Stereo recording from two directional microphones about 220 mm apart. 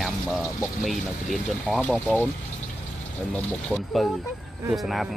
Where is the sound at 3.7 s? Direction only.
Centre (ahead or behind).